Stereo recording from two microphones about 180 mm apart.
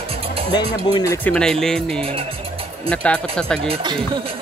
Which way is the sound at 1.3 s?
5° left (ahead or behind).